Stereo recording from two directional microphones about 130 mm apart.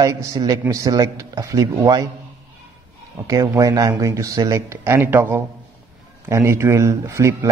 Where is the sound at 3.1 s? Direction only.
25° right (ahead or behind).